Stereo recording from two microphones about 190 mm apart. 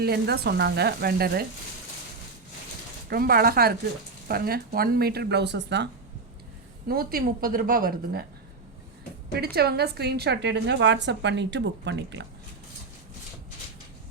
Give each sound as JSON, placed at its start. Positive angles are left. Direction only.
{"t": 0.0, "sound": "a woman's voice", "side_deg": -55}
{"t": 3.1, "sound": "a woman's voice", "side_deg": -55}
{"t": 6.8, "sound": "a woman's voice", "side_deg": -50}
{"t": 9.3, "sound": "a woman's voice", "side_deg": -55}